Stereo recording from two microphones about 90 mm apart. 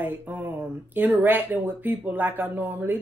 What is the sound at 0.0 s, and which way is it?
Speech, 20° right (ahead or behind).